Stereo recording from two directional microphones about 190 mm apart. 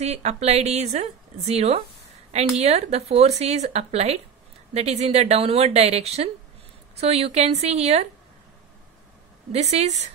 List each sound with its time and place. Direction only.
0.0 s speech: 35° right (ahead or behind)
9.5 s speech: 35° right (ahead or behind)